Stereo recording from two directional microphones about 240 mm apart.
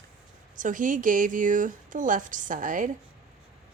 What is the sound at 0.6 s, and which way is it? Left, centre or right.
Speech, right.